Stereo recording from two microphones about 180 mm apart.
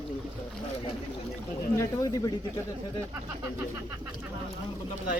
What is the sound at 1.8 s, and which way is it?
Speech, 20° left (ahead or behind).